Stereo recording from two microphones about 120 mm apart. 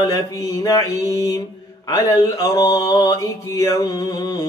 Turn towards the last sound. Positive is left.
turn(degrees=35)  # may be behind; listen again after turning